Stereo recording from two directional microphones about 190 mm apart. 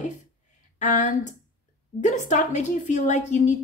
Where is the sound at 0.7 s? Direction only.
40° left (ahead or behind).